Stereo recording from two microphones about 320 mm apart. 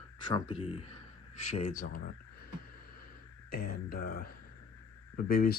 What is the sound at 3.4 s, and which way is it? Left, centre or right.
Speech, left.